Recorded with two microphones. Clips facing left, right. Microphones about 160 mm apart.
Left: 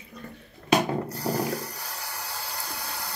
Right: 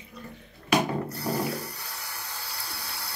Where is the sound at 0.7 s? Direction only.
35° left (ahead or behind).